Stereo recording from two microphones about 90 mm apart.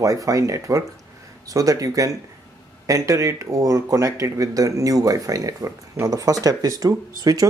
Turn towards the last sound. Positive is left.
turn(degrees=-40)  # may be behind; listen again after turning